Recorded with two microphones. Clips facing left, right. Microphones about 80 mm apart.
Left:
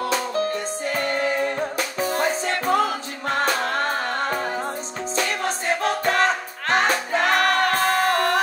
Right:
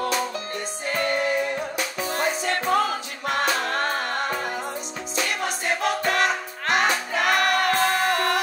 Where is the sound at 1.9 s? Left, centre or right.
Left.